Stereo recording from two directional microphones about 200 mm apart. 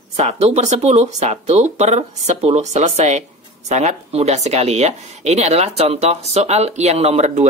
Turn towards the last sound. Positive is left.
turn(degrees=-35)  # may be behind; listen again after turning